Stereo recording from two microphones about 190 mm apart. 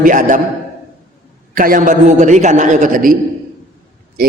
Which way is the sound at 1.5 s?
45° right (ahead or behind).